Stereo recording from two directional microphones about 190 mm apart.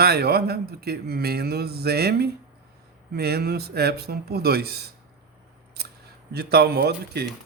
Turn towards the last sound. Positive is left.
turn(degrees=-55)  # may be behind; listen again after turning